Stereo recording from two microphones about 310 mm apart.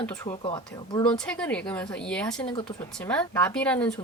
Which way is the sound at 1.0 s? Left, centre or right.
Centre.